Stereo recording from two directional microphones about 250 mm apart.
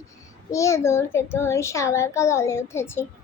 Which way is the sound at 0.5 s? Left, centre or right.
Centre.